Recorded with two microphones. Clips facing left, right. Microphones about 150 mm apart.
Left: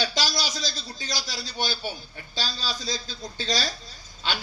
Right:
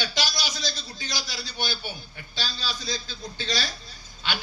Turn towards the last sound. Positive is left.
turn(degrees=35)  # may be behind; listen again after turning